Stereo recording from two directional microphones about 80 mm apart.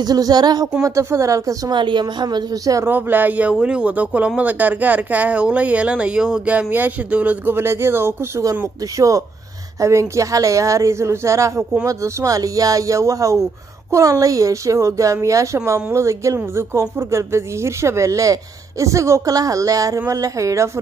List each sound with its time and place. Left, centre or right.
0.0 s speech: right
0.8 s speech: right
1.7 s a woman's voice: right
2.9 s speech: right
7.5 s a woman's voice: right
8.5 s a woman's voice: right